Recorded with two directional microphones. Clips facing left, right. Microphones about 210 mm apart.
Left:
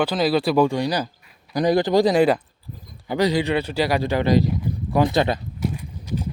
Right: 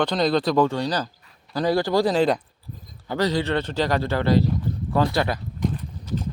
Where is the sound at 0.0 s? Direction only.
5° left (ahead or behind); by 5.4 s 20° left (ahead or behind).